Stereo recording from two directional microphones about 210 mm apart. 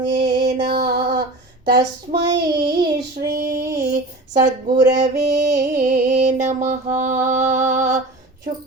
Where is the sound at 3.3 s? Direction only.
45° right (ahead or behind).